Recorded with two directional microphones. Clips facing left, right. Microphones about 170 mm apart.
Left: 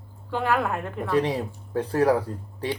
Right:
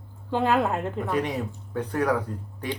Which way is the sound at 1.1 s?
30° left (ahead or behind).